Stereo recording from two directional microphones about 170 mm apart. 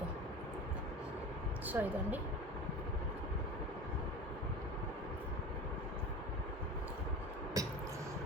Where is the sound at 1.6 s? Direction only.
10° right (ahead or behind).